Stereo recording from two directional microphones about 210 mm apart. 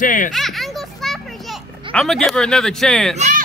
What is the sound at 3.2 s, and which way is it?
Fowl, 40° right (ahead or behind).